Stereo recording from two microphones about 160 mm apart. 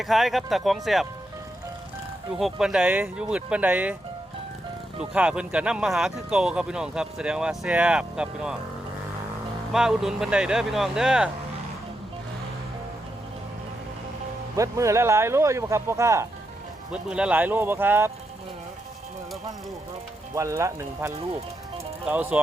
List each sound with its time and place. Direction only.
0.0 s speech: centre (ahead or behind)
2.4 s speech: 5° right (ahead or behind)
4.9 s speech: 5° right (ahead or behind)
9.7 s speech: 5° right (ahead or behind)
14.5 s speech: 20° right (ahead or behind)
16.9 s speech: 5° right (ahead or behind)
20.3 s speech: 20° right (ahead or behind)